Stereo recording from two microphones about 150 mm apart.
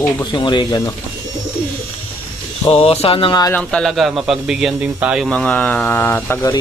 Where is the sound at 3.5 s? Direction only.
10° left (ahead or behind); by 5.2 s 10° right (ahead or behind).